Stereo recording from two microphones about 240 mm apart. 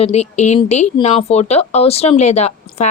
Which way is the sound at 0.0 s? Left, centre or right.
Left.